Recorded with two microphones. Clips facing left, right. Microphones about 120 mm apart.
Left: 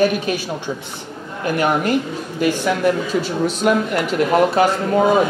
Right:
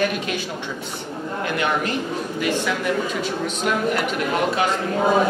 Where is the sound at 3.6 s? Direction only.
50° left (ahead or behind).